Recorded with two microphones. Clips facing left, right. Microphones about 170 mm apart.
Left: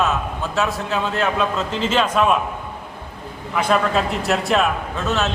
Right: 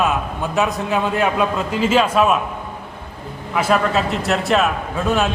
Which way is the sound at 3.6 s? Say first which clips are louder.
Right 1 dB; 5° right (ahead or behind).